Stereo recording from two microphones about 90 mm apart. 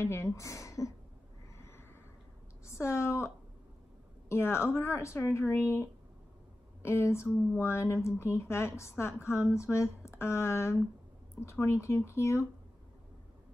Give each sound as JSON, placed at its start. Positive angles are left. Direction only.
{"t": 0.0, "sound": "a woman's voice", "side_deg": 30}
{"t": 1.6, "sound": "a sound", "side_deg": 25}
{"t": 2.6, "sound": "a woman's voice", "side_deg": 30}